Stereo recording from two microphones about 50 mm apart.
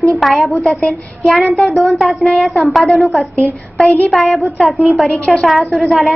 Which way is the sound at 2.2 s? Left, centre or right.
Centre.